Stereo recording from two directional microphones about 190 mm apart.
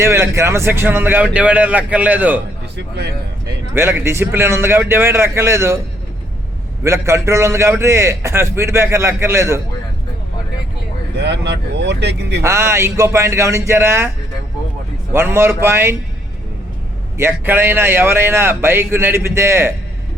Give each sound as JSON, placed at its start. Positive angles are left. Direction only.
{"t": 0.0, "sound": "a man's voice", "side_deg": -15}
{"t": 3.8, "sound": "a man's voice", "side_deg": -10}
{"t": 6.8, "sound": "a man's voice", "side_deg": -15}
{"t": 11.2, "sound": "speech", "side_deg": -65}
{"t": 12.4, "sound": "a man's voice", "side_deg": -15}
{"t": 15.1, "sound": "a man's voice", "side_deg": -10}
{"t": 17.2, "sound": "a man's voice", "side_deg": -10}